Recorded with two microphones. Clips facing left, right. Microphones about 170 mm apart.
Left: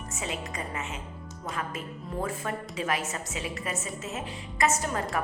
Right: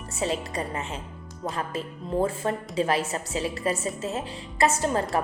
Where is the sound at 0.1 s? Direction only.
35° right (ahead or behind).